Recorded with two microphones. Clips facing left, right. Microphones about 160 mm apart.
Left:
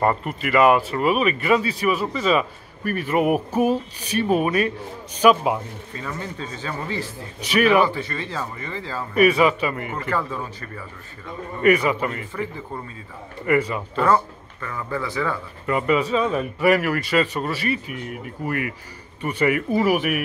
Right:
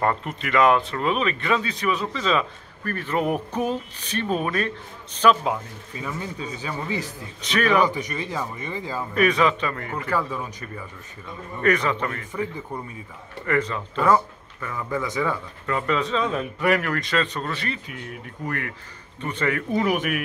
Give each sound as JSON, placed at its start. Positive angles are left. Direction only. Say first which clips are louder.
{"t": 0.0, "sound": "speech", "louder": "left 3 dB", "side_deg": 5}
{"t": 5.9, "sound": "speech", "louder": "even", "side_deg": -15}
{"t": 7.4, "sound": "speech", "louder": "left 4 dB", "side_deg": 10}
{"t": 7.8, "sound": "speech", "louder": "left 1 dB", "side_deg": -15}
{"t": 9.1, "sound": "speech", "louder": "left 4 dB", "side_deg": 10}
{"t": 11.6, "sound": "speech", "louder": "left 4 dB", "side_deg": 10}
{"t": 12.3, "sound": "a man's voice", "louder": "even", "side_deg": -20}
{"t": 13.5, "sound": "speech", "louder": "left 3 dB", "side_deg": 10}
{"t": 14.0, "sound": "speech", "louder": "even", "side_deg": -10}
{"t": 15.6, "sound": "speech", "louder": "left 4 dB", "side_deg": 10}